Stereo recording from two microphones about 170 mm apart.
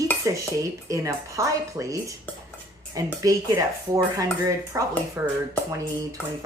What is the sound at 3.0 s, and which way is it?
Speech, 20° right (ahead or behind).